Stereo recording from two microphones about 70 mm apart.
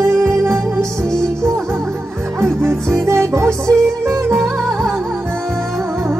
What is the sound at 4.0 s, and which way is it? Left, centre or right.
Music, right.